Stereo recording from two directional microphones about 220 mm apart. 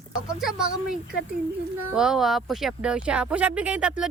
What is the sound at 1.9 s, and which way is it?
Speech, centre (ahead or behind).